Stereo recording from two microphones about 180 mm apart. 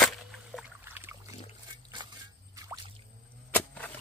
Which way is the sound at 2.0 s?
25° right (ahead or behind).